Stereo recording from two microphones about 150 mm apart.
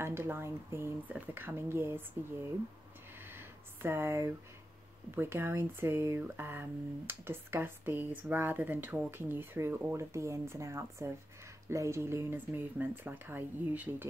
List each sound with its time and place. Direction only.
0.0 s speech: 15° right (ahead or behind)
3.2 s a sound: 15° right (ahead or behind)
5.1 s speech: 15° right (ahead or behind)